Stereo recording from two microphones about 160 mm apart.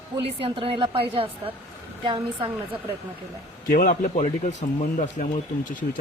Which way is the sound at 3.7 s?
60° left (ahead or behind).